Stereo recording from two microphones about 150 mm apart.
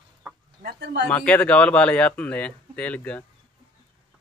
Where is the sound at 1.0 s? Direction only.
10° left (ahead or behind).